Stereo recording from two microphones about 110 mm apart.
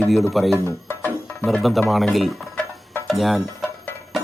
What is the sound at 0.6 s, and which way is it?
Speech, 20° left (ahead or behind).